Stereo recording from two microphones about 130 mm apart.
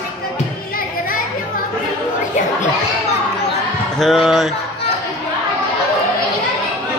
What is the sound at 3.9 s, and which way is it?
Speech, centre (ahead or behind).